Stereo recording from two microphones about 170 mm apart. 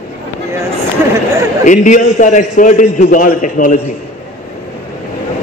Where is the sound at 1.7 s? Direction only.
50° left (ahead or behind).